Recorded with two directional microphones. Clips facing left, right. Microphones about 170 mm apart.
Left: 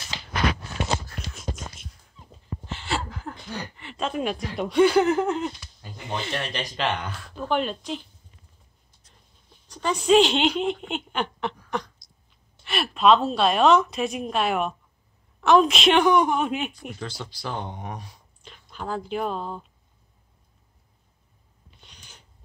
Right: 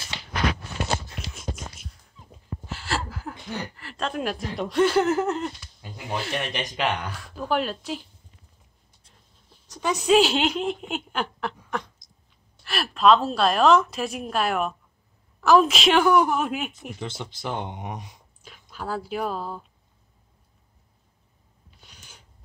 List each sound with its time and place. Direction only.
1.3 s a sound: centre (ahead or behind)
3.7 s speech: centre (ahead or behind)
6.4 s speech: 15° right (ahead or behind)
9.5 s a woman's voice: 10° right (ahead or behind)
12.6 s speech: centre (ahead or behind)
17.0 s speech: 20° right (ahead or behind)
18.4 s speech: 5° right (ahead or behind)
21.8 s a sound: 5° right (ahead or behind)